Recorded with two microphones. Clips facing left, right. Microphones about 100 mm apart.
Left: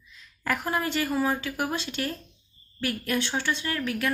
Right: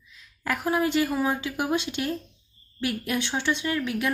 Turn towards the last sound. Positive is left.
turn(degrees=-15)  # may be behind; listen again after turning